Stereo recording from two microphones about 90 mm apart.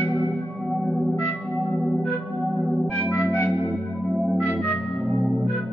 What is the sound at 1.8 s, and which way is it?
Organ, centre (ahead or behind).